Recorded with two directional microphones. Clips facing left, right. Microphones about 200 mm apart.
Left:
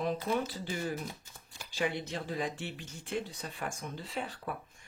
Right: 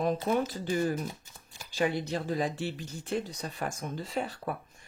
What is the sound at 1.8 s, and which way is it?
Speech, 40° right (ahead or behind).